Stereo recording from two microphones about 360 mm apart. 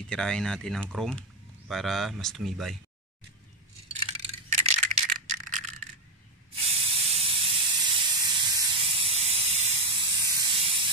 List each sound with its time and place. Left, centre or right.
0.1 s speech: centre
4.5 s rattle: centre
6.7 s steam: centre